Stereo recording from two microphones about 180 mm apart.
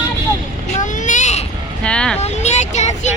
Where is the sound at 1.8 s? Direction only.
5° left (ahead or behind).